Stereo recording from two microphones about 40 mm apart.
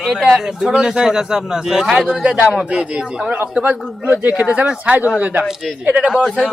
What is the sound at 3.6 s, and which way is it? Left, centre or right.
Speech, right.